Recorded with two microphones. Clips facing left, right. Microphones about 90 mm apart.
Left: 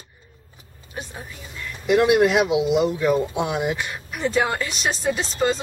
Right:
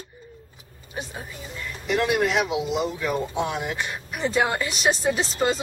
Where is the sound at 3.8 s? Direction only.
Centre (ahead or behind).